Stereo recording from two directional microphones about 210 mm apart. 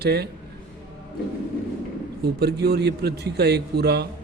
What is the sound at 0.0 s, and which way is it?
Speech, 50° right (ahead or behind).